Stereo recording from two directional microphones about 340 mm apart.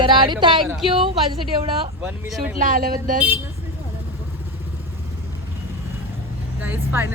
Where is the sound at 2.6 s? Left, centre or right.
Right.